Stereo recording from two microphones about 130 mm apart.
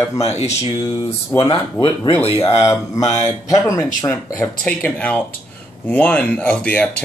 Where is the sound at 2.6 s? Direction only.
25° left (ahead or behind).